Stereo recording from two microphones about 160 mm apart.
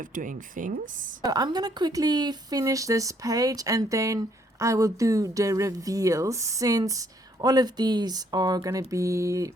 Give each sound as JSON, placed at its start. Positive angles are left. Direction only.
{"t": 0.1, "sound": "speech", "side_deg": -55}
{"t": 1.2, "sound": "a woman's voice", "side_deg": -25}